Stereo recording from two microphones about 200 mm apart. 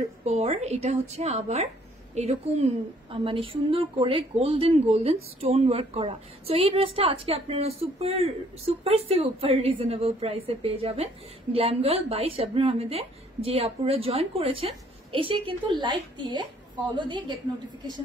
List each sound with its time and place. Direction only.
0.2 s a woman's voice: 35° right (ahead or behind)